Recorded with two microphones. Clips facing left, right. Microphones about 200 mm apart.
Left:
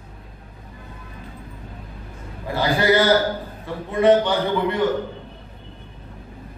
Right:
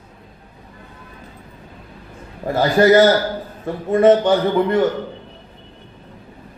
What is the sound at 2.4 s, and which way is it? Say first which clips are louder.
A man's voice: right 6 dB; 45° right (ahead or behind).